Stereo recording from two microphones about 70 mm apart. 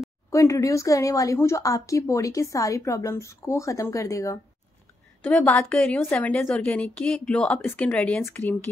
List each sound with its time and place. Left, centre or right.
0.3 s a woman's voice: left
5.7 s speech: centre
8.2 s speech: left